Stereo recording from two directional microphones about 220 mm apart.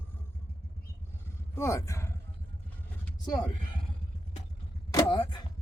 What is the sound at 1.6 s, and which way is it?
Speech, 15° left (ahead or behind).